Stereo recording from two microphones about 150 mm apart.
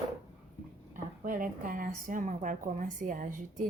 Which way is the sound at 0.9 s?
65° right (ahead or behind).